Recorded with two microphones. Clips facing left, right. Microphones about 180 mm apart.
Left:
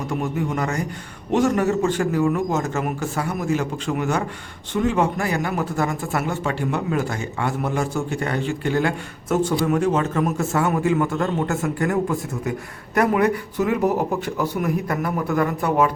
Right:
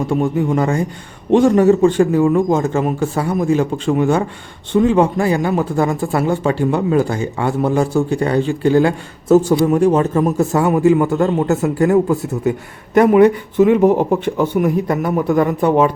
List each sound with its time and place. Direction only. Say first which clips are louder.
0.1 s a man's voice: right 7 dB; 30° right (ahead or behind)